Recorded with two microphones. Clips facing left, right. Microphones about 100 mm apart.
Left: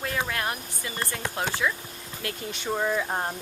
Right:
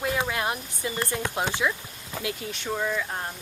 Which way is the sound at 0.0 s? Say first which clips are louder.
Right 2 dB; 15° right (ahead or behind).